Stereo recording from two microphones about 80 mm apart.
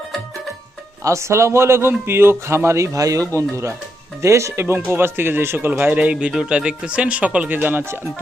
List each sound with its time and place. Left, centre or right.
1.0 s a man's voice: right